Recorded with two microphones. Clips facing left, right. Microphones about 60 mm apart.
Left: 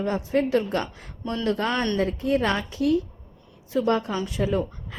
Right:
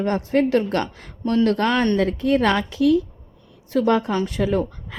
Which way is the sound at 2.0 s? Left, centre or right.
Right.